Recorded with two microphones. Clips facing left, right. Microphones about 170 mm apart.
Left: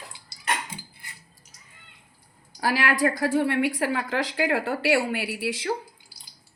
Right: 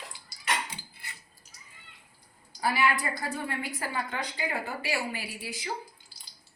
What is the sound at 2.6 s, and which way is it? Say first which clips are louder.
A woman's voice: left 4 dB; 90° left.